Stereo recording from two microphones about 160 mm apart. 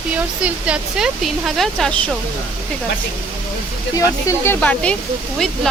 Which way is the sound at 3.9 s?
20° left (ahead or behind).